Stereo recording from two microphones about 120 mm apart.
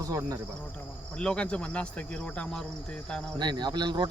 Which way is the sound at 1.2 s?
10° left (ahead or behind).